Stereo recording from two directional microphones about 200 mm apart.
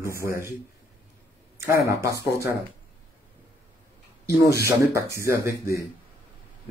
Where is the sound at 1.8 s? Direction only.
15° right (ahead or behind).